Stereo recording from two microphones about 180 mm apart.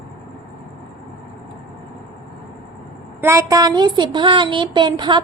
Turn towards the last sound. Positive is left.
turn(degrees=-25)  # may be behind; listen again after turning